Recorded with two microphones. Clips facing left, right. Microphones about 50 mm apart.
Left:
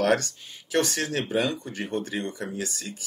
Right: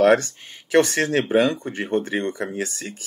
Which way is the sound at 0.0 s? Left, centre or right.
Right.